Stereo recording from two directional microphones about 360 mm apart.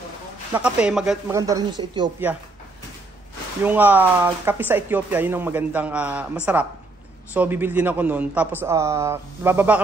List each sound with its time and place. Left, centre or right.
0.5 s speech: centre
3.6 s speech: centre